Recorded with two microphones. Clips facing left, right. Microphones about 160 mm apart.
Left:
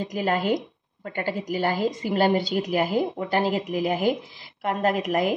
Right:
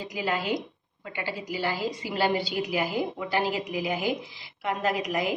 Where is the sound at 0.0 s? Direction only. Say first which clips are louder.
Left 5 dB; 45° left (ahead or behind).